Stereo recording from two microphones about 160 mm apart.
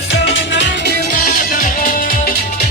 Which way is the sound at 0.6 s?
75° left (ahead or behind).